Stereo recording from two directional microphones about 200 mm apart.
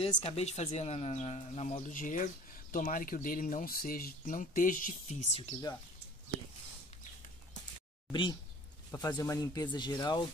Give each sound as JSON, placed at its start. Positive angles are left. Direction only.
{"t": 0.0, "sound": "speech", "side_deg": 30}
{"t": 8.1, "sound": "speech", "side_deg": 25}